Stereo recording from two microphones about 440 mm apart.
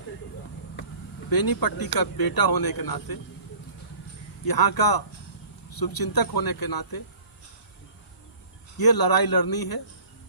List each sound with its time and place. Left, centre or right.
1.3 s speech: left
4.4 s speech: left
8.8 s speech: left